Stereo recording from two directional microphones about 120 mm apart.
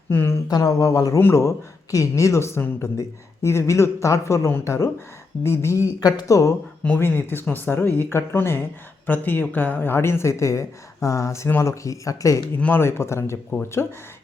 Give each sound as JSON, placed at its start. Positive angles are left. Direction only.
{"t": 0.1, "sound": "speech", "side_deg": 20}
{"t": 0.4, "sound": "a woman's voice", "side_deg": 30}
{"t": 6.8, "sound": "a woman's voice", "side_deg": 15}
{"t": 12.5, "sound": "a woman's voice", "side_deg": 15}